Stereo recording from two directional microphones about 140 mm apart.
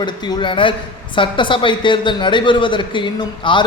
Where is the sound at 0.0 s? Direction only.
35° left (ahead or behind).